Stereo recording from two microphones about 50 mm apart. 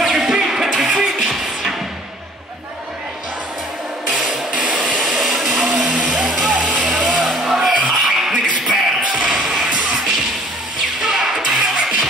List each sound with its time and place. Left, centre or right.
0.0 s music: centre
4.1 s a sound: centre
5.0 s blender: centre
5.9 s music: centre
6.1 s music: centre
6.5 s music: centre
6.9 s music: centre